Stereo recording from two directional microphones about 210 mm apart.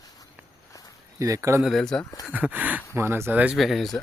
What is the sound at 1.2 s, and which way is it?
Speech, 15° right (ahead or behind).